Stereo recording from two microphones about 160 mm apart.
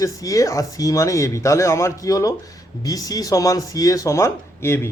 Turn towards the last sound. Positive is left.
turn(degrees=15)  # may be behind; listen again after turning